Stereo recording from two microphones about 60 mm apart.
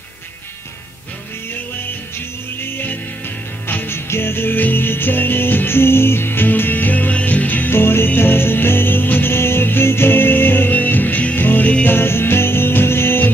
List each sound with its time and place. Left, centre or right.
2.6 s music: left
7.7 s music: left